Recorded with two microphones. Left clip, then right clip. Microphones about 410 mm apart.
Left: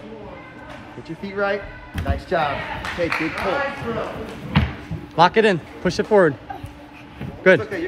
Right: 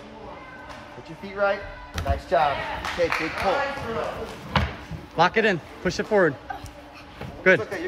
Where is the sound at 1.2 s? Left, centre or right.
Centre.